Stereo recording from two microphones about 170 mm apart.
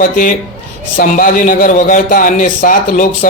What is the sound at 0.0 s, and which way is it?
Speech, 55° left (ahead or behind).